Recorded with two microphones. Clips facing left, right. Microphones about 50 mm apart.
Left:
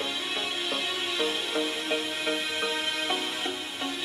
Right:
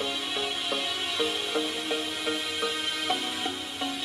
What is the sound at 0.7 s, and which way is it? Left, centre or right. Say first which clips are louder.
Music: even; centre.